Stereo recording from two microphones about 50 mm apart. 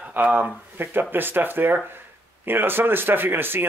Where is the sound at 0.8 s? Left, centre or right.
Right.